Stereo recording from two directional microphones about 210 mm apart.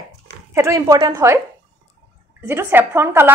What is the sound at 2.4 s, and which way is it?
Speech, 10° right (ahead or behind).